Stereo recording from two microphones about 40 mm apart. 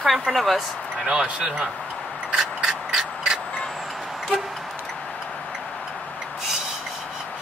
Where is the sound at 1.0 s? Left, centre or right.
Right.